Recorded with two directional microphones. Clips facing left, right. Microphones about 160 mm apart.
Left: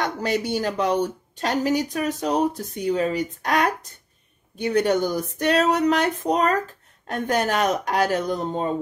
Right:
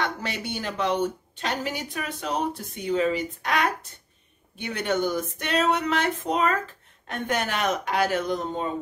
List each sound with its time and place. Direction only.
0.0 s speech: 40° left (ahead or behind)